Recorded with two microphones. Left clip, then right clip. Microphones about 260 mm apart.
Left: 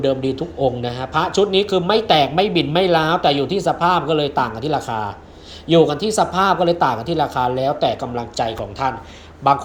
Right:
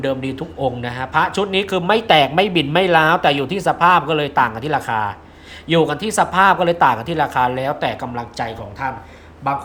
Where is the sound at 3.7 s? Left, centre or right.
Centre.